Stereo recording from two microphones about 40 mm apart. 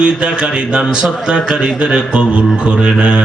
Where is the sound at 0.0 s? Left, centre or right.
Right.